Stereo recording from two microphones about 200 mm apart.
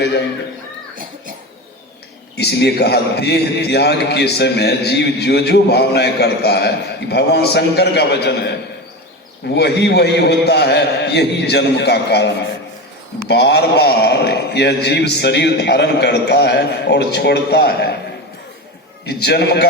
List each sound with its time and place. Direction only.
2.3 s a man's voice: 55° left (ahead or behind)
9.6 s a man's voice: 55° left (ahead or behind)
19.0 s a man's voice: 55° left (ahead or behind)